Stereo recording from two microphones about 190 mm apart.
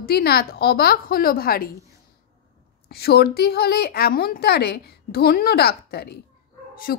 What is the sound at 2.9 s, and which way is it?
A woman's voice, 55° left (ahead or behind).